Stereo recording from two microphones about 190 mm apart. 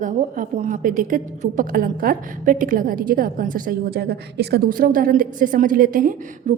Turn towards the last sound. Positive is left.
turn(degrees=-45)  # may be behind; listen again after turning